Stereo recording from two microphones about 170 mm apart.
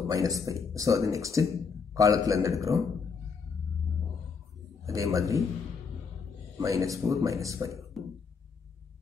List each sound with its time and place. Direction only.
0.0 s speech: 20° right (ahead or behind)
4.8 s speech: 20° right (ahead or behind)
6.6 s speech: 20° right (ahead or behind)